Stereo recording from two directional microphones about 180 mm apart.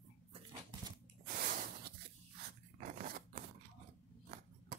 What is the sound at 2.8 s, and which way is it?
Scissors, 50° right (ahead or behind).